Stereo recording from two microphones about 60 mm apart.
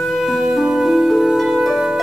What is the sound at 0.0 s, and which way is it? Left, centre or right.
Music, centre.